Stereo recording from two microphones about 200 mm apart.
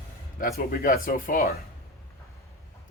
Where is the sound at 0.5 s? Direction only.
50° left (ahead or behind).